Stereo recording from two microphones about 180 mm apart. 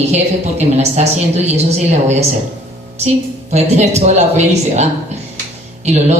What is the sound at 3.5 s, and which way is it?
A woman's voice, 40° right (ahead or behind).